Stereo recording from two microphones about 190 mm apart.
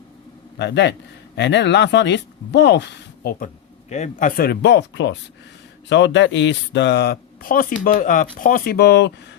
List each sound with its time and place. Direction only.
0.6 s speech: 65° left (ahead or behind)
3.4 s speech: 35° left (ahead or behind); by 9.1 s 60° left (ahead or behind)